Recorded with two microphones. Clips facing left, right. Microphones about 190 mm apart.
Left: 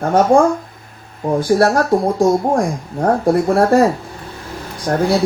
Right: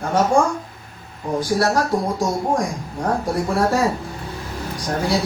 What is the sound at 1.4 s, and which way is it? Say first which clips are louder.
Speech: left 5 dB; 55° left (ahead or behind).